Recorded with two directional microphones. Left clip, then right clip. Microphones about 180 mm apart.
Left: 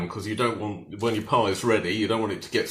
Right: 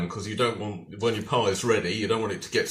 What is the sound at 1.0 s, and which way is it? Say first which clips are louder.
Speech: left 1 dB; 35° left (ahead or behind).